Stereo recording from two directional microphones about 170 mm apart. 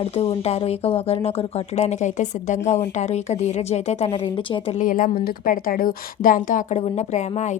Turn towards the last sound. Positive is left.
turn(degrees=40)  # may be behind; listen again after turning